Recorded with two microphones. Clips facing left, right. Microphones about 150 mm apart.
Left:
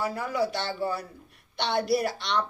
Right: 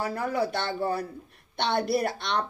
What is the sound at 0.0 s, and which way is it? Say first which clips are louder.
A woman's voice: even; 55° right (ahead or behind).